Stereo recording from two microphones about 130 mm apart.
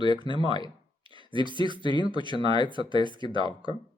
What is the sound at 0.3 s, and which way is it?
Speech, 35° left (ahead or behind).